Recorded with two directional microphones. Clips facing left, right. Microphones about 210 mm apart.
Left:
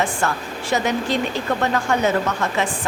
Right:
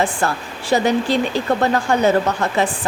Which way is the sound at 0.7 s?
35° right (ahead or behind).